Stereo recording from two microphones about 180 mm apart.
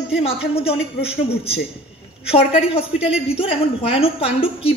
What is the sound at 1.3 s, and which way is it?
Speech, 65° left (ahead or behind).